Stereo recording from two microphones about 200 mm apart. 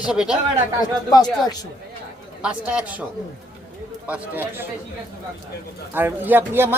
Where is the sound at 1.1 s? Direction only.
20° left (ahead or behind).